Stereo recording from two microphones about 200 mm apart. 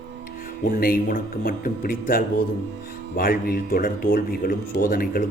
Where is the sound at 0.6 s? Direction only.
45° left (ahead or behind).